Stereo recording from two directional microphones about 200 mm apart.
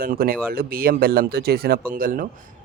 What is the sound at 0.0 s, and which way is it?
Speech, 45° right (ahead or behind).